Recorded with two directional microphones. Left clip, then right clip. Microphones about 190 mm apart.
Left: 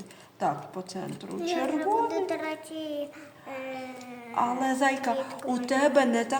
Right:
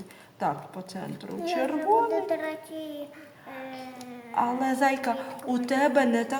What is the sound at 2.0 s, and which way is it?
Speech, 35° left (ahead or behind).